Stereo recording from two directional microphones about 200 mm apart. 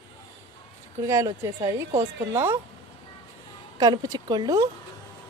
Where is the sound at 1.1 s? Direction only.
15° right (ahead or behind).